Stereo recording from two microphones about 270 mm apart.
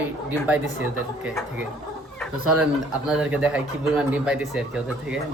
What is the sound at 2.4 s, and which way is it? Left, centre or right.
Speech, right.